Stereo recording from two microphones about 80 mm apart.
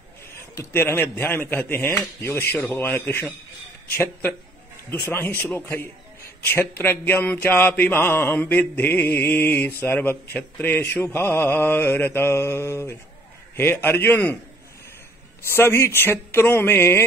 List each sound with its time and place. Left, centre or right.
0.6 s mantra: left
1.9 s speech: left
2.7 s mantra: left
15.4 s mantra: left